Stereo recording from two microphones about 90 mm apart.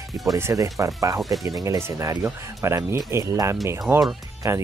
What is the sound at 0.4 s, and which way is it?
Speech, 35° right (ahead or behind).